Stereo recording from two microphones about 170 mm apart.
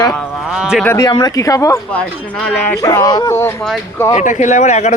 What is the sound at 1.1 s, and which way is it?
Speech, 25° left (ahead or behind).